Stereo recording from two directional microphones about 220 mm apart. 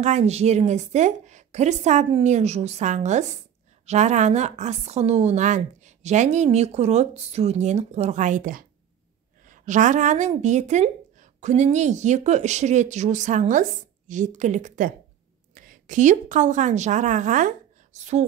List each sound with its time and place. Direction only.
0.0 s a woman's voice: 30° right (ahead or behind)